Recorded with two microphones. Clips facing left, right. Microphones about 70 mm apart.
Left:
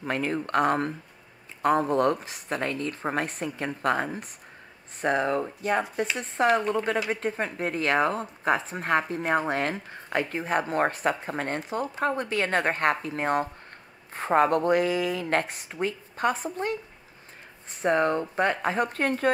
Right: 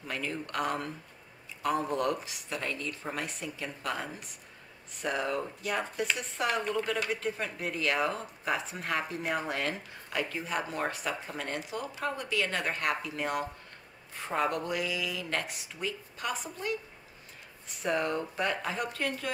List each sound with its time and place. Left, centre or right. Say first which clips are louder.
0.0 s speech: left 8 dB; left